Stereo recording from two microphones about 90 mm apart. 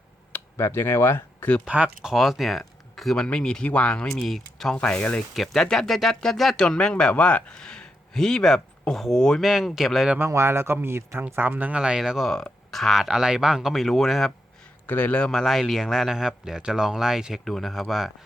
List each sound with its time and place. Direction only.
0.5 s speech: 25° left (ahead or behind)
1.6 s speech: 15° right (ahead or behind)
10.2 s speech: 30° right (ahead or behind)
11.8 s speech: 5° right (ahead or behind)
14.8 s a man's voice: 20° left (ahead or behind)
15.3 s speech: centre (ahead or behind)